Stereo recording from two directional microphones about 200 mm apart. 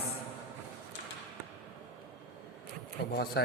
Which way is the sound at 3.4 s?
55° left (ahead or behind).